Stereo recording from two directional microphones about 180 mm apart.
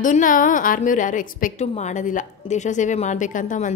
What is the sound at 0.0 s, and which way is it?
A woman's voice, 45° left (ahead or behind).